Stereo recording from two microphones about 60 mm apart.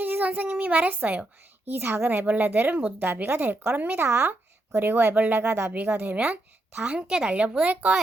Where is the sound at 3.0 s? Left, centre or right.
Right.